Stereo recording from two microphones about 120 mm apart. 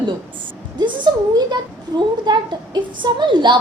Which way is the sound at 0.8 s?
40° right (ahead or behind).